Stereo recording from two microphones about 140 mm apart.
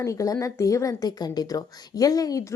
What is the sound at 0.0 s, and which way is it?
A woman's voice, 25° left (ahead or behind).